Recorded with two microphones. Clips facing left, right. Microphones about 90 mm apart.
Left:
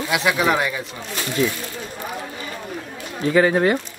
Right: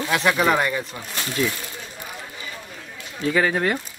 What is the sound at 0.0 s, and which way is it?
Speech, 5° left (ahead or behind).